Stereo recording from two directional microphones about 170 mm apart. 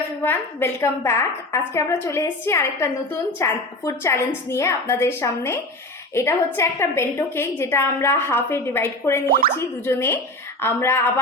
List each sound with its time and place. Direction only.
0.2 s a woman's voice: 15° left (ahead or behind)